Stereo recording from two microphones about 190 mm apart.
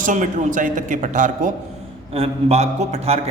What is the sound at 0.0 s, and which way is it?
Speech, 40° right (ahead or behind).